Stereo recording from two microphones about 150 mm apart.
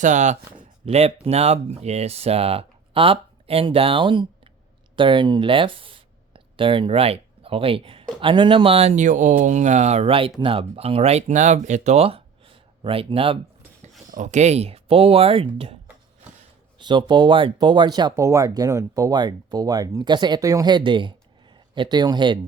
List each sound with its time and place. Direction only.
0.0 s speech: 55° right (ahead or behind)
0.5 s speech: 45° right (ahead or behind)
14.1 s speech: 55° right (ahead or behind); by 15.7 s 40° right (ahead or behind)
16.7 s speech: 30° right (ahead or behind)